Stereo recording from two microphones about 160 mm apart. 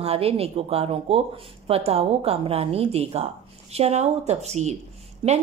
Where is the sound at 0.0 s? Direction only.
40° right (ahead or behind).